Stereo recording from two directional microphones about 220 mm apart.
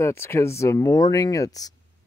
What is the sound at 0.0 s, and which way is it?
Speech, 10° left (ahead or behind).